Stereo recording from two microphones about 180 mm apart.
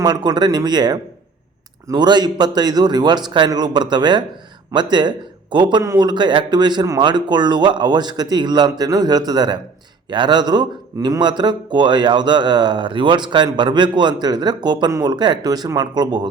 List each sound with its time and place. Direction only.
0.0 s a man's voice: 20° right (ahead or behind)